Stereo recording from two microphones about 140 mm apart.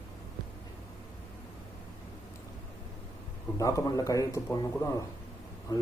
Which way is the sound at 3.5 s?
25° left (ahead or behind).